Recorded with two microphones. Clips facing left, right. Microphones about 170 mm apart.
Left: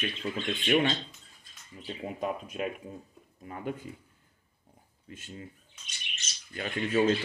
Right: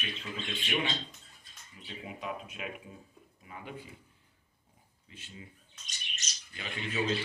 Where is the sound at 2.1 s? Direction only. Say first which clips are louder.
Left 7 dB; 45° left (ahead or behind).